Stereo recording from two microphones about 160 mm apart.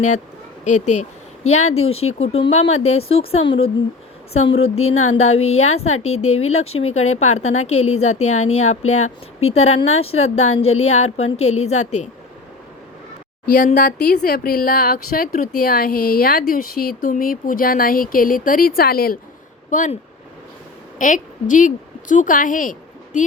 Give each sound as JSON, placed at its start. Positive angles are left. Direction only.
{"t": 0.6, "sound": "a woman's voice", "side_deg": 50}
{"t": 13.4, "sound": "speech", "side_deg": 55}
{"t": 14.0, "sound": "speech", "side_deg": 90}
{"t": 19.7, "sound": "a woman's voice", "side_deg": 55}
{"t": 21.0, "sound": "a woman's voice", "side_deg": 55}